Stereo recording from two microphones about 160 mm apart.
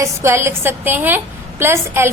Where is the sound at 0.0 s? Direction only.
15° right (ahead or behind).